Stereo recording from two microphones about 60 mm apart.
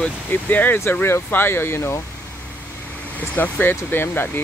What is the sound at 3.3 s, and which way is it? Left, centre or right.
Speech, left.